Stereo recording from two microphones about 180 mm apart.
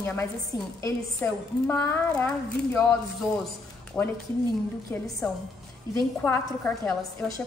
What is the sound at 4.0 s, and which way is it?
Speech, 5° left (ahead or behind).